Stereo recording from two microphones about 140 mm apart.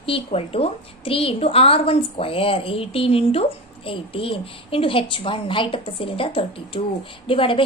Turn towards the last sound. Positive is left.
turn(degrees=40)  # may be behind; listen again after turning